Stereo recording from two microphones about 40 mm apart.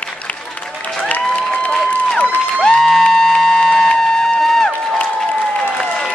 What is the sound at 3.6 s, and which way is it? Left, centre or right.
Music, centre.